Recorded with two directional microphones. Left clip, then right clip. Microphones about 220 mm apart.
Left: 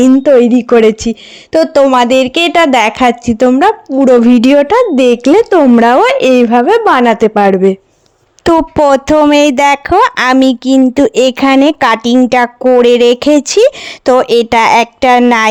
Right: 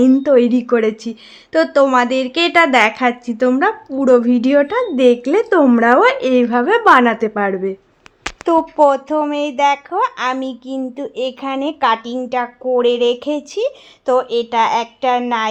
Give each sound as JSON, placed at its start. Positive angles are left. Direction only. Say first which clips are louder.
{"t": 0.1, "sound": "speech", "louder": "left 6 dB", "side_deg": 25}
{"t": 7.0, "sound": "speech", "louder": "left 8 dB", "side_deg": 30}
{"t": 8.4, "sound": "speech", "louder": "left 5 dB", "side_deg": 50}